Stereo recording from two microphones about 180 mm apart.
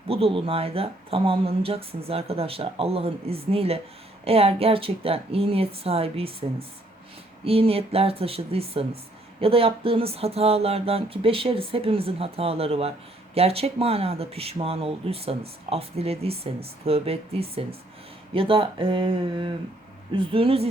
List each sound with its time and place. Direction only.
0.1 s speech: 30° right (ahead or behind)